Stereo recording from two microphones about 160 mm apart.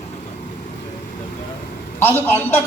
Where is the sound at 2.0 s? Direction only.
10° left (ahead or behind).